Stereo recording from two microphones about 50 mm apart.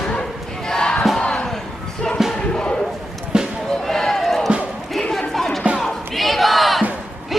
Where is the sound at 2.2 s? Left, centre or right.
Centre.